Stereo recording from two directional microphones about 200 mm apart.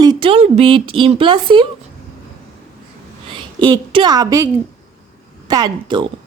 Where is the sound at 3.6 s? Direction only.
25° right (ahead or behind).